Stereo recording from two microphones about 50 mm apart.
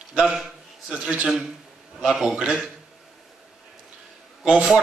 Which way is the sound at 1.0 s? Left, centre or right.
Centre.